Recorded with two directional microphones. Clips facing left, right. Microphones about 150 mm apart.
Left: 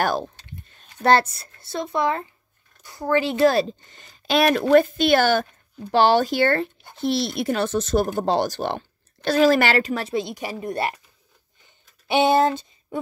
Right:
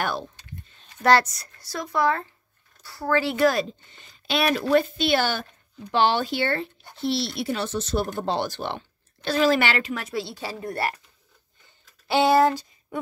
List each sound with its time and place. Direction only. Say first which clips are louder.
0.0 s speech: left 5 dB; 40° left (ahead or behind)
1.0 s speech: left 1 dB; 25° left (ahead or behind)
4.0 s speech: left 5 dB; 45° left (ahead or behind)
10.1 s speech: left 4 dB; 15° left (ahead or behind)
11.6 s a sound: left 2 dB; 20° left (ahead or behind)